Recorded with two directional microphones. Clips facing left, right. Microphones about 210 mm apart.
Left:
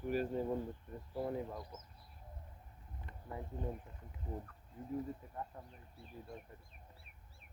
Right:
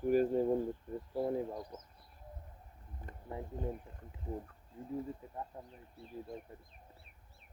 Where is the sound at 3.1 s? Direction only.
45° right (ahead or behind).